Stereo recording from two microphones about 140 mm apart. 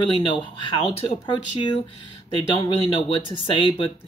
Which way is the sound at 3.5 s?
40° left (ahead or behind).